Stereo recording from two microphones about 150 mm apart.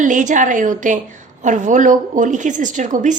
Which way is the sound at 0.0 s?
55° right (ahead or behind).